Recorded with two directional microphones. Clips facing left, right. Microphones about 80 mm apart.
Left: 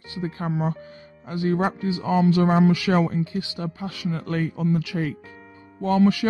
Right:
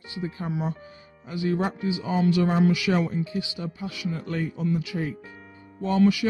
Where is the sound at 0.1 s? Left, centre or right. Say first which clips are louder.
Left 3 dB; left.